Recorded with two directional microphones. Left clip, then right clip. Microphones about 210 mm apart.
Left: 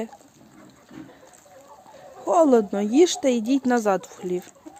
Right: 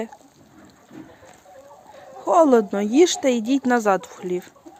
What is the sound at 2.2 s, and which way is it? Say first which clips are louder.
Speech: right 2 dB; centre (ahead or behind).